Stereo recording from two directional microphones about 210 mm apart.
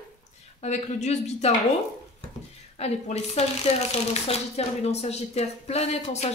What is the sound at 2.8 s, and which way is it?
Speech, 30° left (ahead or behind).